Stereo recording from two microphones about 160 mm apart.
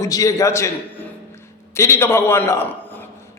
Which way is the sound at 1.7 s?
15° left (ahead or behind).